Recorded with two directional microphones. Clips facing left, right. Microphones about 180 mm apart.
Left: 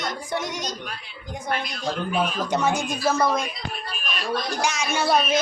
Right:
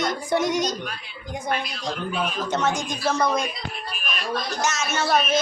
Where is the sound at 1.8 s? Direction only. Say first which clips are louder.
Left 6 dB; 10° left (ahead or behind).